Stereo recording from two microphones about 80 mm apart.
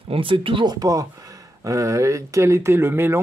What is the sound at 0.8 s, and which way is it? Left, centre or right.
Speech, right.